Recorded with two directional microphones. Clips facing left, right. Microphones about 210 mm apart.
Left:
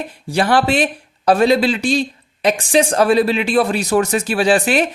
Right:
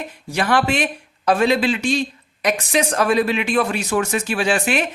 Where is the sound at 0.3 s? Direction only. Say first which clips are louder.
Left 3 dB; 35° left (ahead or behind).